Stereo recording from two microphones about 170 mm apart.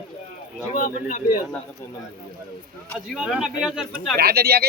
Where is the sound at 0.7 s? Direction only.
50° left (ahead or behind).